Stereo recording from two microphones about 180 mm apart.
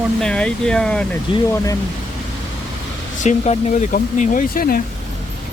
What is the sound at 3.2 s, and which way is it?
Speech, 40° left (ahead or behind).